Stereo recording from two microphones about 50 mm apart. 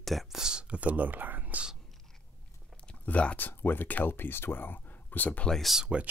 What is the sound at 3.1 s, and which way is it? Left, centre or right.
Speech, left.